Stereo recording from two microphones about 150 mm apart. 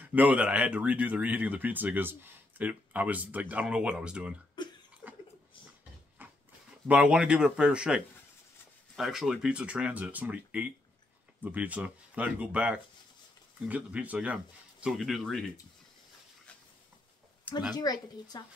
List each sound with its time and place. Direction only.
0.0 s speech: 10° right (ahead or behind)
4.6 s cough: 30° left (ahead or behind)
6.9 s speech: 10° right (ahead or behind)
17.7 s a woman's voice: 25° left (ahead or behind)